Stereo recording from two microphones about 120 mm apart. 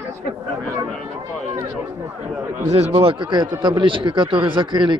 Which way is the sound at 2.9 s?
40° right (ahead or behind).